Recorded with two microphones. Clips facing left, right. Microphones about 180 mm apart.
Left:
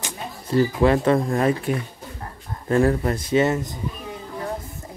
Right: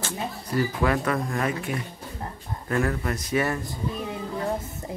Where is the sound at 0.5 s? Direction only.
30° left (ahead or behind).